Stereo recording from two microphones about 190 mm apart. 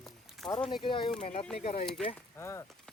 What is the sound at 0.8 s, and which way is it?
Speech, 25° left (ahead or behind).